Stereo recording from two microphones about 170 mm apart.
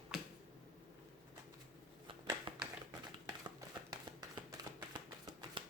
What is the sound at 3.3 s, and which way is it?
Horse, 25° right (ahead or behind).